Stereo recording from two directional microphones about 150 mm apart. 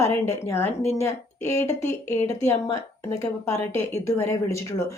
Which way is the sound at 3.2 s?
20° left (ahead or behind).